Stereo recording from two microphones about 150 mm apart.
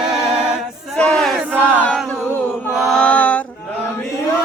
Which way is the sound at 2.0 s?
15° left (ahead or behind).